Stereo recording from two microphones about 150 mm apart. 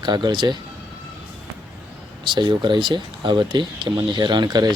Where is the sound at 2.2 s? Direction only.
30° right (ahead or behind).